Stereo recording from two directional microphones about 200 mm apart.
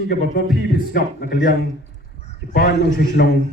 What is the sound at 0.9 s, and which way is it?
Speech, 50° left (ahead or behind).